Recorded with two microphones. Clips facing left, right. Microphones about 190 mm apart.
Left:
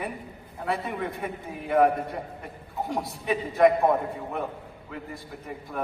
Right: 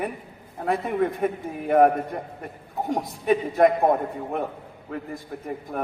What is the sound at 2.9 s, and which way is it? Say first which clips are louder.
Speech: right 6 dB; 50° right (ahead or behind).